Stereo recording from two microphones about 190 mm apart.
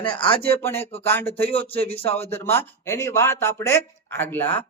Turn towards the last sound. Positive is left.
turn(degrees=10)  # may be behind; listen again after turning